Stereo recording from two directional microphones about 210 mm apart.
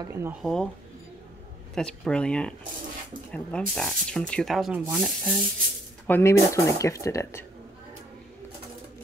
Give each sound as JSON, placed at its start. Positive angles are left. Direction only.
{"t": 0.0, "sound": "speech", "side_deg": -10}
{"t": 0.4, "sound": "speech", "side_deg": 0}
{"t": 1.8, "sound": "speech", "side_deg": 5}
{"t": 6.0, "sound": "speech", "side_deg": 10}